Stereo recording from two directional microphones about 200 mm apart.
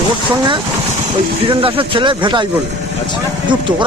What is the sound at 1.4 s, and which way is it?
Speech, 25° right (ahead or behind).